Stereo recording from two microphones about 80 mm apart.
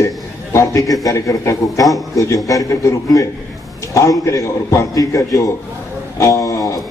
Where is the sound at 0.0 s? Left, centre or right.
Left.